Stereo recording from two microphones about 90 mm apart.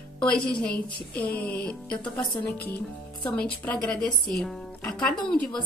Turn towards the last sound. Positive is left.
turn(degrees=5)  # may be behind; listen again after turning